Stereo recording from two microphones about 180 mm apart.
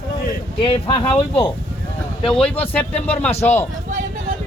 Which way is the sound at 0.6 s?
30° left (ahead or behind).